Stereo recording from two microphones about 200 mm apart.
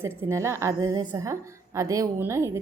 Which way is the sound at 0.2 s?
15° right (ahead or behind).